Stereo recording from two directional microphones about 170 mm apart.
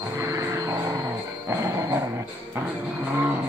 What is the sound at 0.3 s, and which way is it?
Vehicle, 20° right (ahead or behind).